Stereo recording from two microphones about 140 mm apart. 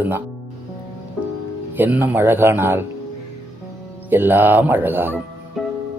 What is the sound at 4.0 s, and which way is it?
Speech, 15° right (ahead or behind).